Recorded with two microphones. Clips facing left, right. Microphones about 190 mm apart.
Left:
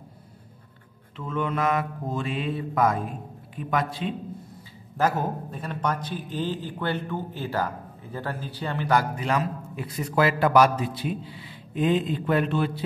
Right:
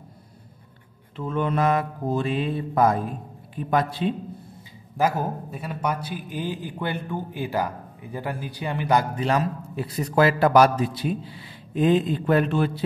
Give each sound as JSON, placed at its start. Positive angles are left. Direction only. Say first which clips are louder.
{"t": 1.1, "sound": "a man's voice", "louder": "right 3 dB", "side_deg": -35}
{"t": 4.9, "sound": "a man's voice", "louder": "right 1 dB", "side_deg": -10}
{"t": 9.1, "sound": "a man's voice", "louder": "right 3 dB", "side_deg": -35}